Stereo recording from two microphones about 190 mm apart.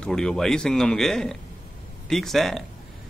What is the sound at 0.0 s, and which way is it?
Speech, 5° left (ahead or behind).